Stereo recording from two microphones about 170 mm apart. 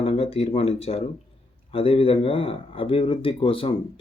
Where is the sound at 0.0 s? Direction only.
35° left (ahead or behind).